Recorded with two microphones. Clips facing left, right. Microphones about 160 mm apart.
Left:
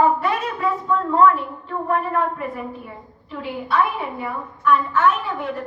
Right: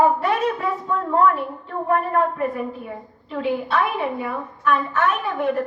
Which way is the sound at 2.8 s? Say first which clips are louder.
Right 4 dB; 60° right (ahead or behind).